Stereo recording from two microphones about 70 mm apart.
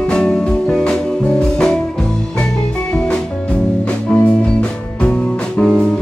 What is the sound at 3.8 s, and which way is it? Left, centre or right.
Music, centre.